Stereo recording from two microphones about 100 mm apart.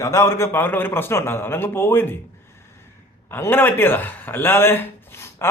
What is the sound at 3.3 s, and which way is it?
Speech, 20° left (ahead or behind).